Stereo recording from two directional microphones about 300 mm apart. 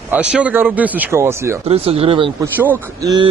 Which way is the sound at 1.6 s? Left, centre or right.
Centre.